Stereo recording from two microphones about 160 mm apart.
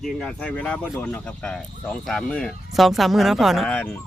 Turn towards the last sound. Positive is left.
turn(degrees=10)  # may be behind; listen again after turning